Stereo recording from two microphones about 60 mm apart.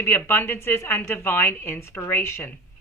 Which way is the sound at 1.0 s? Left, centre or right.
Left.